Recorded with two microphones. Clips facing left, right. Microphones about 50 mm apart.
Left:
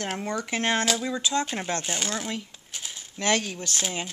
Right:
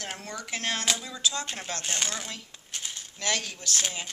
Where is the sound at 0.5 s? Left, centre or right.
Left.